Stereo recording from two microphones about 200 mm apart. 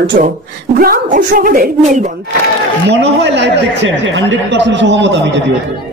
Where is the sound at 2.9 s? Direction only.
60° right (ahead or behind).